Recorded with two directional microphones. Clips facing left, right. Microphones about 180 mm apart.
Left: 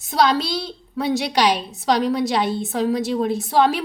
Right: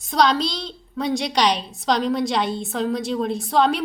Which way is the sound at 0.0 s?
5° left (ahead or behind).